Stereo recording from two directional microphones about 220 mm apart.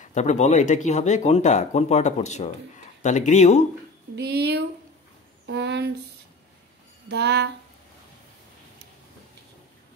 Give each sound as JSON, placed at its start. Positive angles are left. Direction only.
{"t": 0.0, "sound": "speech", "side_deg": 35}
{"t": 4.1, "sound": "speech", "side_deg": -50}
{"t": 7.1, "sound": "speech", "side_deg": -50}